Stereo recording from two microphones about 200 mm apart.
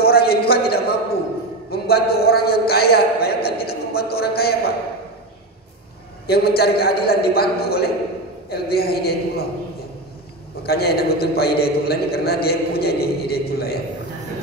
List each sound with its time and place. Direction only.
0.0 s a sound: 50° left (ahead or behind)
1.7 s a man's voice: 50° left (ahead or behind)
6.2 s a man's voice: 50° left (ahead or behind)
10.6 s a man's voice: 50° left (ahead or behind)